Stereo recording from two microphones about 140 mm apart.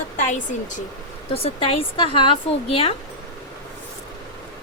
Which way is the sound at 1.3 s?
45° left (ahead or behind).